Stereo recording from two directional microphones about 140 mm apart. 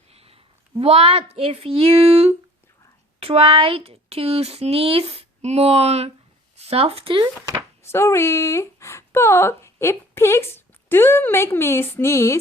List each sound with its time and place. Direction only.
0.1 s a sound: 45° right (ahead or behind)
0.8 s speech: 45° right (ahead or behind)
7.9 s speech: 20° left (ahead or behind)